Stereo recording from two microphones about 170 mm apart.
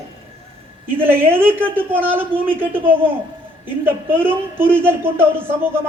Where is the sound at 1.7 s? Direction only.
10° right (ahead or behind).